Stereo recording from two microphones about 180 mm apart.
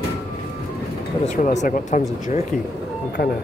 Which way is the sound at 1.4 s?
45° left (ahead or behind).